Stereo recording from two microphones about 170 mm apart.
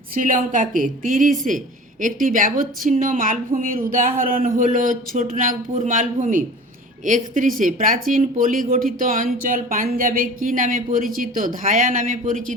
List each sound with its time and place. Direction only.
0.1 s speech: 55° right (ahead or behind)